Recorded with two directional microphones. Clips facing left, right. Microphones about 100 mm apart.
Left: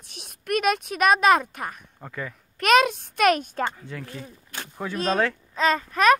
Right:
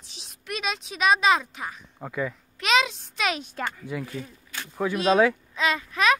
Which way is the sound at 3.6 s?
25° left (ahead or behind).